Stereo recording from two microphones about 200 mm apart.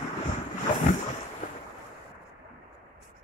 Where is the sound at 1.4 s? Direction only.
40° left (ahead or behind).